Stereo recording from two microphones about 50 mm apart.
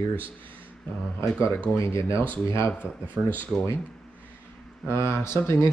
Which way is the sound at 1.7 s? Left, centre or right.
Left.